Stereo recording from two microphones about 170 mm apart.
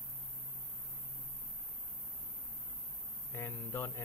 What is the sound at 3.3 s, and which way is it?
Speech, 15° left (ahead or behind).